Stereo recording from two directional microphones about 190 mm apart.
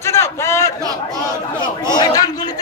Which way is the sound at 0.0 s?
15° left (ahead or behind).